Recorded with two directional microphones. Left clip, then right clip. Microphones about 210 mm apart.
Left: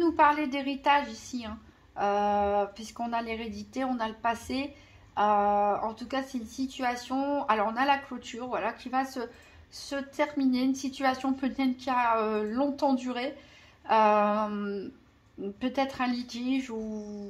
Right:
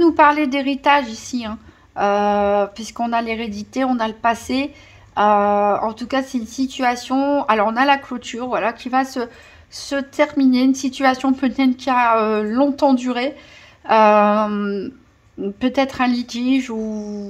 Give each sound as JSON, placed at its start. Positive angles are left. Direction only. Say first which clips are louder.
{"t": 0.0, "sound": "a woman's voice", "louder": "right 10 dB", "side_deg": -45}